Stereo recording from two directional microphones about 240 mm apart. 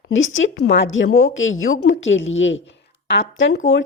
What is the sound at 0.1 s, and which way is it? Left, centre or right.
A woman's voice, left.